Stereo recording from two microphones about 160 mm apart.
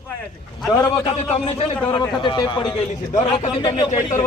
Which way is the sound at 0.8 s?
30° left (ahead or behind).